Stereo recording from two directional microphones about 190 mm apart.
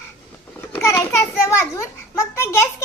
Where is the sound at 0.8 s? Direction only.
15° left (ahead or behind).